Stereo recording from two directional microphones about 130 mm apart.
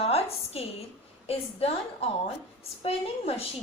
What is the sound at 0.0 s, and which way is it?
A woman's voice, 50° left (ahead or behind).